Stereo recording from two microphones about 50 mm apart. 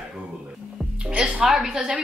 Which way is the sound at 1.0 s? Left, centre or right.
Centre.